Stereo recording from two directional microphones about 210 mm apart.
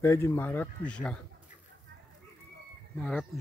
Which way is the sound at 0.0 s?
10° left (ahead or behind).